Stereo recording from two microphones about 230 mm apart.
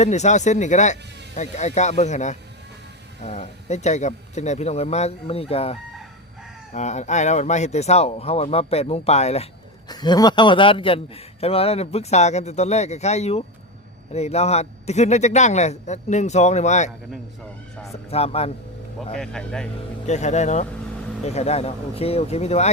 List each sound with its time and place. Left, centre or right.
0.0 s a man's voice: left
6.7 s a man's voice: left
9.9 s a man's voice: centre
18.1 s a man's voice: left
18.9 s speech: centre
20.1 s a man's voice: left